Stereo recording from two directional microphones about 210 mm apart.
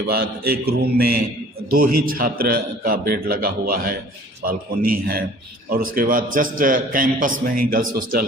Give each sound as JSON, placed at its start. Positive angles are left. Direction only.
{"t": 0.1, "sound": "a man's voice", "side_deg": -45}